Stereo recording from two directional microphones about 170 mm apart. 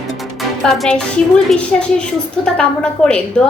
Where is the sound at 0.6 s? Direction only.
Centre (ahead or behind).